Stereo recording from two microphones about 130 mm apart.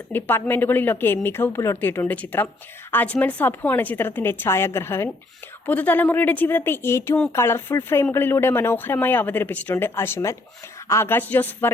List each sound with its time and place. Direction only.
0.1 s speech: 15° left (ahead or behind)